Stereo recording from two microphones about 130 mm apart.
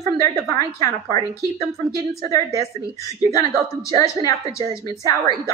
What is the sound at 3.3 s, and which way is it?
A woman's voice, 25° left (ahead or behind).